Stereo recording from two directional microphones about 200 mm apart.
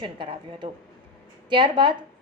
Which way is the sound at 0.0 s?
25° right (ahead or behind).